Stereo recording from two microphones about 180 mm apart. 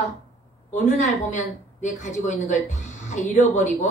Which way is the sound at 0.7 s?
40° left (ahead or behind).